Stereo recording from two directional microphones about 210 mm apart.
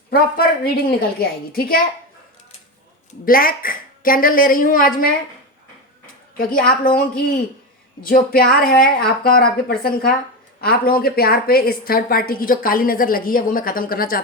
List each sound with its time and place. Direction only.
0.1 s a woman's voice: 45° left (ahead or behind)
3.2 s a woman's voice: 45° left (ahead or behind)
6.3 s a woman's voice: 45° left (ahead or behind)
8.0 s a woman's voice: 45° left (ahead or behind)